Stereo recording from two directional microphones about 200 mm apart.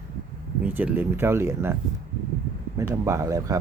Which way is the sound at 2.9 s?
15° right (ahead or behind).